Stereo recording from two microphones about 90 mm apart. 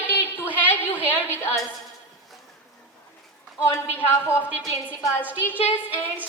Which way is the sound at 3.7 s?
30° left (ahead or behind).